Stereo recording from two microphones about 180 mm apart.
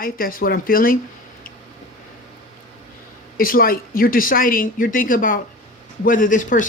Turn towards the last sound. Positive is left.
turn(degrees=45)  # may be behind; listen again after turning